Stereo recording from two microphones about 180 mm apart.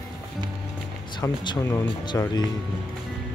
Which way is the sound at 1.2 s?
20° left (ahead or behind).